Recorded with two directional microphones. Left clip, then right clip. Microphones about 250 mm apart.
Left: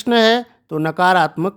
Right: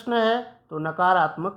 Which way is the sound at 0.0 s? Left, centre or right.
Left.